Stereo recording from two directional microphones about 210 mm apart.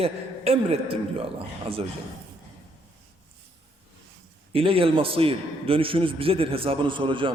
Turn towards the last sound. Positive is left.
turn(degrees=-25)  # may be behind; listen again after turning